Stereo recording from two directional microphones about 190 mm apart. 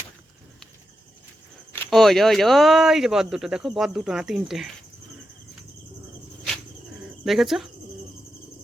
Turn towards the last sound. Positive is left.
turn(degrees=0)  # may be behind; listen again after turning